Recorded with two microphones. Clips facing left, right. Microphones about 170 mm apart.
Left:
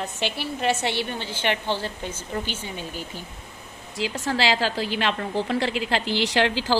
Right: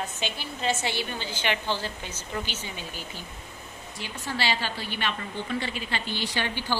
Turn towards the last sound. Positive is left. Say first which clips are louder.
# left 7 dB
turn(degrees=90)